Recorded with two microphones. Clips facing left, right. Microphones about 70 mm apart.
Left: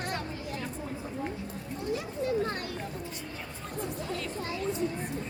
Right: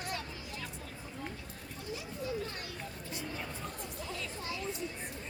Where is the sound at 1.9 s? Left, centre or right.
Left.